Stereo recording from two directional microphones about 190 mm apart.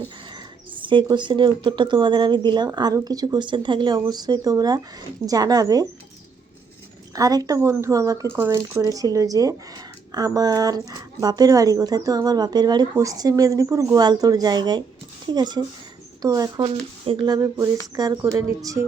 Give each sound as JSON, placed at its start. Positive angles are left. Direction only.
{"t": 0.8, "sound": "speech", "side_deg": -25}
{"t": 7.1, "sound": "speech", "side_deg": -20}